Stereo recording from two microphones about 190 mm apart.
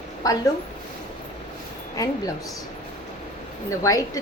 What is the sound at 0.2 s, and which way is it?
Speech, 20° left (ahead or behind).